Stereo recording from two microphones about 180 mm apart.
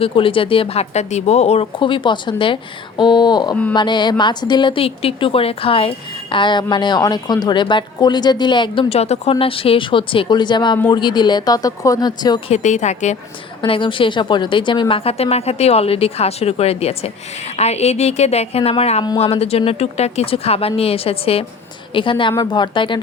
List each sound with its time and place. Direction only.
0.0 s speech: 30° left (ahead or behind)
3.5 s speech: 10° left (ahead or behind)
3.8 s a woman's voice: 25° left (ahead or behind)
12.5 s a woman's voice: 40° left (ahead or behind)
13.6 s a woman's voice: 30° left (ahead or behind)